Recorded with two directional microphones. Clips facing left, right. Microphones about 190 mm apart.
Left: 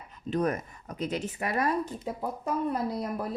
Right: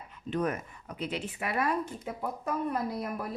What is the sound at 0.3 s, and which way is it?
Speech, 40° left (ahead or behind).